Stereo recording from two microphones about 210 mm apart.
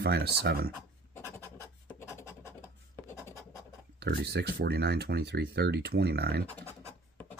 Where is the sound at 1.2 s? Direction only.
10° left (ahead or behind).